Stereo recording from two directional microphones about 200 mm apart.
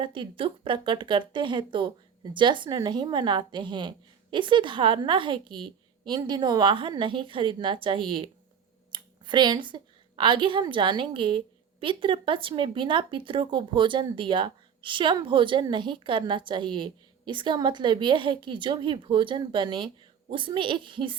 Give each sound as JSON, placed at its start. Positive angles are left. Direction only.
{"t": 0.0, "sound": "a woman's voice", "side_deg": -25}